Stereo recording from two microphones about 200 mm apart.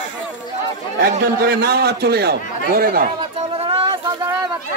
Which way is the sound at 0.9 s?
55° right (ahead or behind).